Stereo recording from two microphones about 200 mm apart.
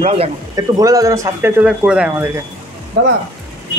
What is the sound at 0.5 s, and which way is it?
Speech, 15° right (ahead or behind).